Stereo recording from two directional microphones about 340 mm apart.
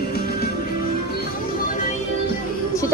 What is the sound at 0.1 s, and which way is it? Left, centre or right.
Music, left.